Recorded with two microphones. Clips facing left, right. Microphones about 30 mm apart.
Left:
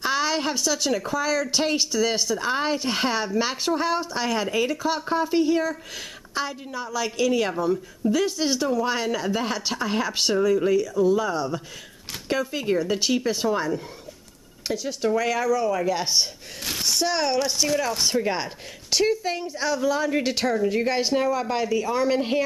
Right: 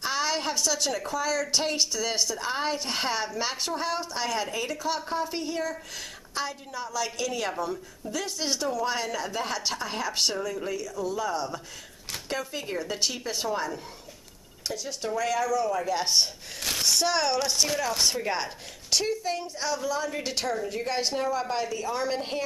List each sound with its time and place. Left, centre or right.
0.0 s speech: centre
18.2 s speech: centre
19.9 s speech: left
21.3 s speech: centre